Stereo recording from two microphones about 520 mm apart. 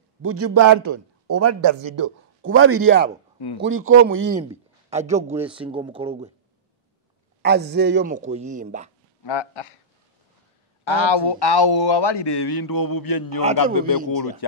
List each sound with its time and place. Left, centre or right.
0.2 s a man's voice: right
2.4 s a man's voice: right
7.4 s a man's voice: centre
9.2 s speech: left
10.8 s a man's voice: left